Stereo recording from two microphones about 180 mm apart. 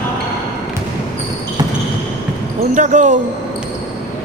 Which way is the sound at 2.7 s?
45° right (ahead or behind).